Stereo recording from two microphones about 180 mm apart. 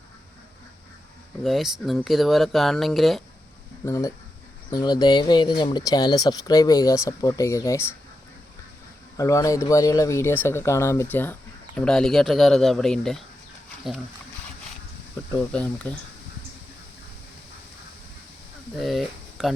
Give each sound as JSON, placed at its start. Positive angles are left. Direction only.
{"t": 1.5, "sound": "speech", "side_deg": 0}
{"t": 3.8, "sound": "speech", "side_deg": 15}
{"t": 9.1, "sound": "speech", "side_deg": 15}
{"t": 15.4, "sound": "speech", "side_deg": 5}
{"t": 18.8, "sound": "a sound", "side_deg": 0}